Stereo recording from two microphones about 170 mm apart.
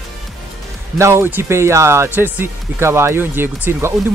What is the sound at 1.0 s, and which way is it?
Speech, 15° right (ahead or behind).